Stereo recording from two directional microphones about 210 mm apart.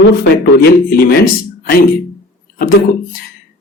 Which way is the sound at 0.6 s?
50° left (ahead or behind).